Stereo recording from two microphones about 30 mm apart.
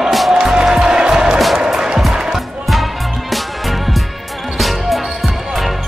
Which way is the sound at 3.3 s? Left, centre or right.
Centre.